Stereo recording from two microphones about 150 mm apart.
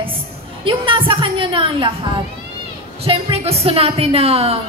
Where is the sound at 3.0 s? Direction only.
40° right (ahead or behind).